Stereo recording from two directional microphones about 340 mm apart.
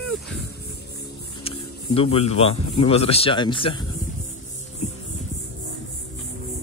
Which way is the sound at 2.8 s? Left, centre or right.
Centre.